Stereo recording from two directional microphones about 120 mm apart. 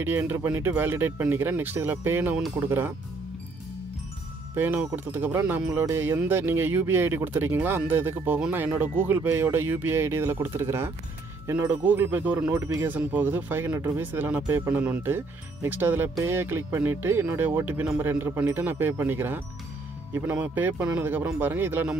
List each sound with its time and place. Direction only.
0.0 s speech: 15° right (ahead or behind)
4.6 s speech: 15° right (ahead or behind)